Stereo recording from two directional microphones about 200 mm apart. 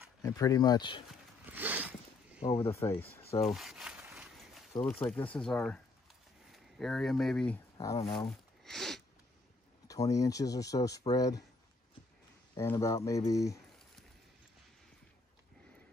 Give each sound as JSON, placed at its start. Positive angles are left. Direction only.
{"t": 0.2, "sound": "speech", "side_deg": 20}
{"t": 1.4, "sound": "zipper", "side_deg": -10}
{"t": 2.5, "sound": "speech", "side_deg": 15}
{"t": 3.3, "sound": "speech", "side_deg": 30}
{"t": 3.5, "sound": "a sound", "side_deg": 0}
{"t": 5.0, "sound": "speech", "side_deg": 5}
{"t": 7.7, "sound": "a sound", "side_deg": 15}
{"t": 8.3, "sound": "a sound", "side_deg": 0}
{"t": 9.8, "sound": "speech", "side_deg": 15}
{"t": 12.5, "sound": "speech", "side_deg": 15}